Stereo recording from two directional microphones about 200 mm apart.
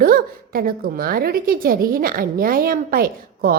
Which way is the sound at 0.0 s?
45° right (ahead or behind).